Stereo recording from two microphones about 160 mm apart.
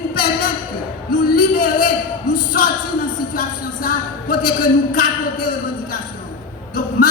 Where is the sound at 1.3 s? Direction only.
65° left (ahead or behind).